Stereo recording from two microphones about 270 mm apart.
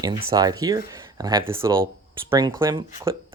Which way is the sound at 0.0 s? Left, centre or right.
Centre.